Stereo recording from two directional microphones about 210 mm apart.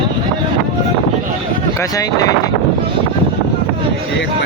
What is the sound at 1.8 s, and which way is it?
Speech, 15° left (ahead or behind).